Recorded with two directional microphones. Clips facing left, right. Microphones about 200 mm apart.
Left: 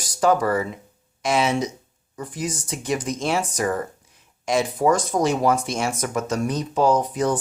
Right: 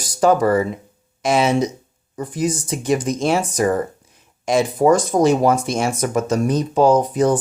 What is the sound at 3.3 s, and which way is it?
Speech, 30° right (ahead or behind).